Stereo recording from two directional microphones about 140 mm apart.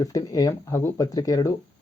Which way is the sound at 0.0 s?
25° left (ahead or behind).